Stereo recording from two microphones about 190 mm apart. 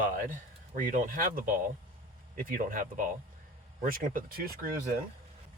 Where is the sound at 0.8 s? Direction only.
45° right (ahead or behind).